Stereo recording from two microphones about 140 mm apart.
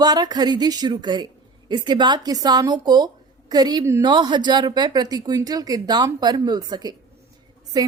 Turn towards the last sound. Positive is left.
turn(degrees=-30)  # may be behind; listen again after turning